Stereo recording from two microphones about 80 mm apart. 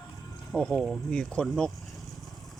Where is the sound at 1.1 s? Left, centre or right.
Centre.